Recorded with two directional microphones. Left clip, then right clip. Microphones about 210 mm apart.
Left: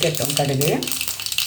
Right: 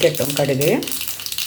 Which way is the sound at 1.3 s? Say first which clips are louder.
Left 4 dB; 10° left (ahead or behind).